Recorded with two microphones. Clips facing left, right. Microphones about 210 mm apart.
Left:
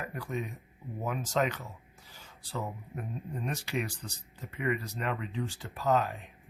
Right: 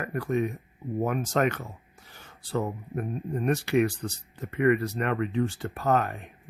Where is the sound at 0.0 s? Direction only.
60° right (ahead or behind).